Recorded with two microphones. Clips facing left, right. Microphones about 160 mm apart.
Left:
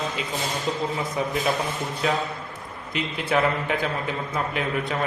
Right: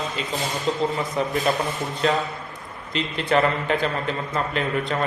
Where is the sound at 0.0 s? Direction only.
Centre (ahead or behind).